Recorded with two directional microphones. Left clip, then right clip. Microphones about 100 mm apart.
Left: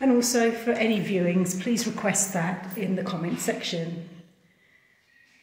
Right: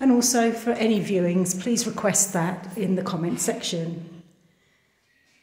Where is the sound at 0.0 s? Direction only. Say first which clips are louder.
Right 1 dB; 45° right (ahead or behind).